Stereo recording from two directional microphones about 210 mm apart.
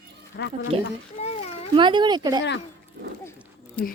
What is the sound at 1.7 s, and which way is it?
Speech, 20° right (ahead or behind).